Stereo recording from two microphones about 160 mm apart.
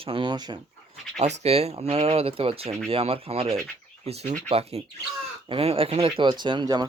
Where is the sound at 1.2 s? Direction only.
40° right (ahead or behind).